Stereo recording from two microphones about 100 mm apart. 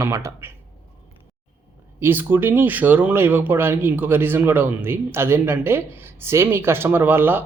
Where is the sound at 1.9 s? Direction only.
20° right (ahead or behind).